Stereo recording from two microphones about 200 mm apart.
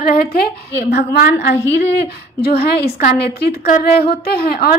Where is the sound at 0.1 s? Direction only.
50° left (ahead or behind).